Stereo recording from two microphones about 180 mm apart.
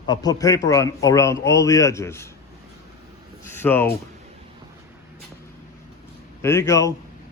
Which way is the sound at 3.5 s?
10° left (ahead or behind).